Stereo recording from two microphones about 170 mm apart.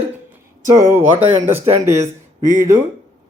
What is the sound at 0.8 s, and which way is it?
A man's voice, 15° right (ahead or behind).